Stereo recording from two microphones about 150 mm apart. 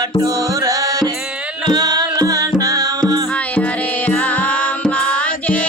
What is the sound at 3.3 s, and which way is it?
Music, 10° left (ahead or behind).